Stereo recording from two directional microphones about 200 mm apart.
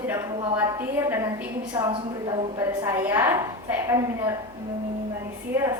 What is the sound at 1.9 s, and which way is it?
Speech, 25° right (ahead or behind).